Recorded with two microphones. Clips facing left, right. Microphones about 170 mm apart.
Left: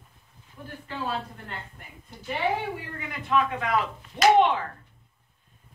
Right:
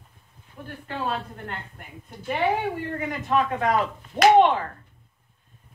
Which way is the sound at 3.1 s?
40° right (ahead or behind).